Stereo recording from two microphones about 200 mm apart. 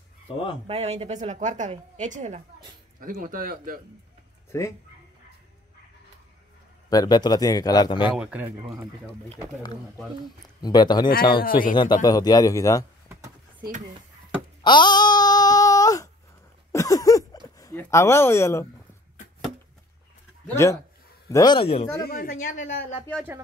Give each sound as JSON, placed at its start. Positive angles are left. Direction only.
{"t": 0.7, "sound": "a woman's voice", "side_deg": -30}
{"t": 4.5, "sound": "speech", "side_deg": 15}
{"t": 6.9, "sound": "speech", "side_deg": 20}
{"t": 8.2, "sound": "speech", "side_deg": -5}
{"t": 10.6, "sound": "speech", "side_deg": 20}
{"t": 11.4, "sound": "a woman's voice", "side_deg": 45}
{"t": 11.7, "sound": "speech", "side_deg": 20}
{"t": 13.1, "sound": "a sound", "side_deg": -15}
{"t": 14.6, "sound": "a sound", "side_deg": 20}
{"t": 17.6, "sound": "speech", "side_deg": 15}
{"t": 20.6, "sound": "speech", "side_deg": 15}
{"t": 22.0, "sound": "a woman's voice", "side_deg": 45}